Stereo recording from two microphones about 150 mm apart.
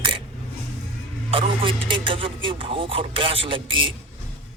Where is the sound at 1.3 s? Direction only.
35° right (ahead or behind).